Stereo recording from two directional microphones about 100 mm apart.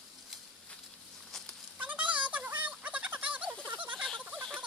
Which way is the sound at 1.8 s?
15° right (ahead or behind).